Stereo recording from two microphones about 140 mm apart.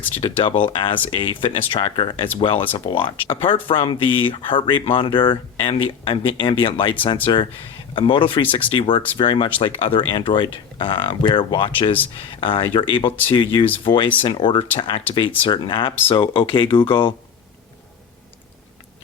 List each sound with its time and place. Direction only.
0.2 s speech: 35° left (ahead or behind)